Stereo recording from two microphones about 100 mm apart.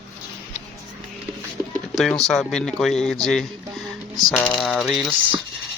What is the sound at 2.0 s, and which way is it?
Speech, centre (ahead or behind).